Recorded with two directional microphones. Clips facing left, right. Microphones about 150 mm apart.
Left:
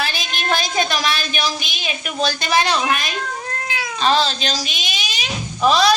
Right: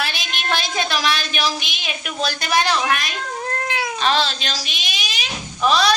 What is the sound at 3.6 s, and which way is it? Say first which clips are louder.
Cat: right 3 dB; 60° right (ahead or behind).